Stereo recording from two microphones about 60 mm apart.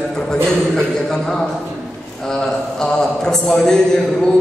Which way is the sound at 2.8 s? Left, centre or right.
Centre.